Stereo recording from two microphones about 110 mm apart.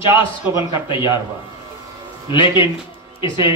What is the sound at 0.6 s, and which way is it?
Speech, 45° left (ahead or behind).